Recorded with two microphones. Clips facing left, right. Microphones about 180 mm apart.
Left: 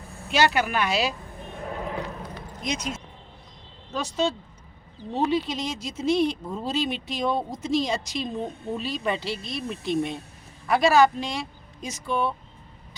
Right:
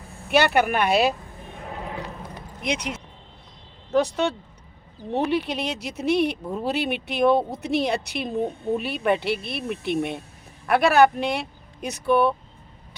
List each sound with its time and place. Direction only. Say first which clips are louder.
0.3 s speech: right 3 dB; 60° right (ahead or behind)
2.6 s speech: right 3 dB; 65° right (ahead or behind)